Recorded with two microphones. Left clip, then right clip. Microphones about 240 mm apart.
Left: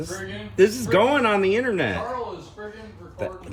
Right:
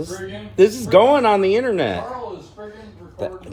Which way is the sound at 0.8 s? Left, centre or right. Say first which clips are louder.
Right 6 dB; centre.